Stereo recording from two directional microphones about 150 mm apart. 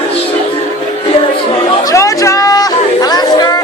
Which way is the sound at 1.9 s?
20° left (ahead or behind).